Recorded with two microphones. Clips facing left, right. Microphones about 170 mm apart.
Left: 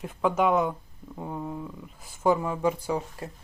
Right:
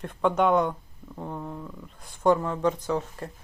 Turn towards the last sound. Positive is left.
turn(degrees=10)  # may be behind; listen again after turning